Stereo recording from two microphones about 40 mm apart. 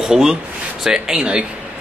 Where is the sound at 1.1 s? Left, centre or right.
Right.